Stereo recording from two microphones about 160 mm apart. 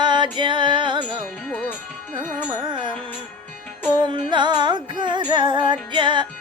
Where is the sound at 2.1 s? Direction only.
30° right (ahead or behind).